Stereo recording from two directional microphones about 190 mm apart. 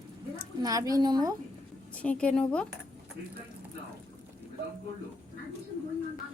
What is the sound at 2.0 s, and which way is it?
Speech, 5° left (ahead or behind).